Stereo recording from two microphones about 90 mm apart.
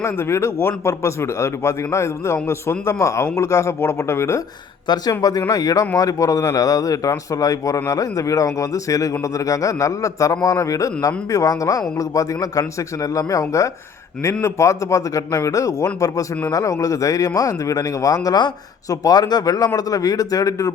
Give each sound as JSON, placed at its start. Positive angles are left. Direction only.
{"t": 0.0, "sound": "speech", "side_deg": 30}
{"t": 4.9, "sound": "speech", "side_deg": 55}
{"t": 5.5, "sound": "speech", "side_deg": 40}